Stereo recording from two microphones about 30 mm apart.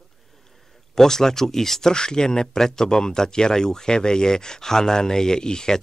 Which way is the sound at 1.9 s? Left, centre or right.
Left.